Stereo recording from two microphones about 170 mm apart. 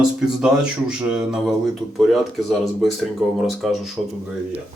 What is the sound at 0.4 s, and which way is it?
Speech, 5° right (ahead or behind).